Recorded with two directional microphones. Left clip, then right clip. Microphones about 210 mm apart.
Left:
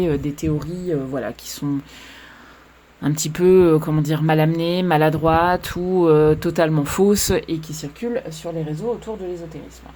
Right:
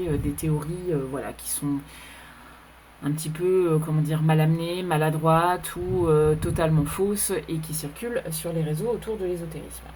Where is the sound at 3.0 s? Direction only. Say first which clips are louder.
Left 9 dB; 50° left (ahead or behind).